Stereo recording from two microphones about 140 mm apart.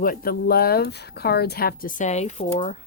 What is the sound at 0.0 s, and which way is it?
Speech, 90° left.